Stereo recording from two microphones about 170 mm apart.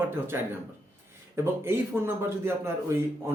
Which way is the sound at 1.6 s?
15° right (ahead or behind).